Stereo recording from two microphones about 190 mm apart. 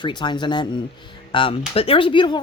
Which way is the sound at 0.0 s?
25° left (ahead or behind).